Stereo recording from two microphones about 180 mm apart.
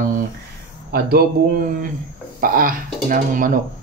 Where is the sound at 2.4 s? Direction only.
50° right (ahead or behind).